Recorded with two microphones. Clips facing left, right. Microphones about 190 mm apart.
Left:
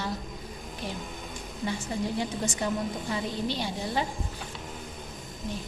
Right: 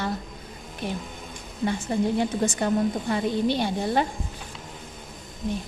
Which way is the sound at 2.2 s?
55° right (ahead or behind).